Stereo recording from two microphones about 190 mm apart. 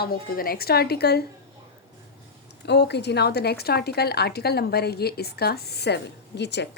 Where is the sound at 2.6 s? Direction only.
60° left (ahead or behind).